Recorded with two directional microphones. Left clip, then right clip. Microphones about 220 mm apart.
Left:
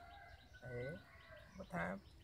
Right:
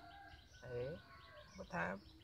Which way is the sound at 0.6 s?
15° right (ahead or behind).